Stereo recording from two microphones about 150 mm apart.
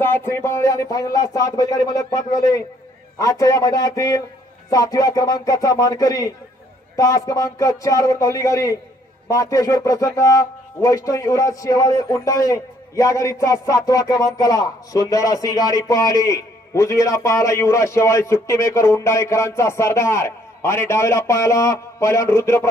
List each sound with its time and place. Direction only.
0.0 s speech: 15° left (ahead or behind)